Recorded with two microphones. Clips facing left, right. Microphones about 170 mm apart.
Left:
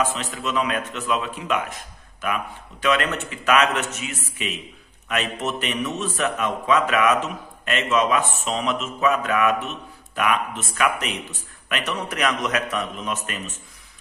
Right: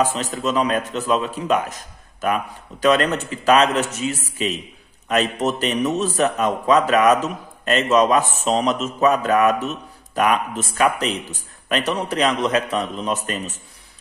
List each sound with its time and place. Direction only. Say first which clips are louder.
0.0 s a man's voice: right 4 dB; 40° right (ahead or behind)